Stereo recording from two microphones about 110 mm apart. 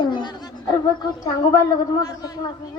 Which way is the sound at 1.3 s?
30° left (ahead or behind).